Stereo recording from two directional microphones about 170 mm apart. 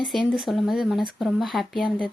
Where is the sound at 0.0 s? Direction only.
5° left (ahead or behind).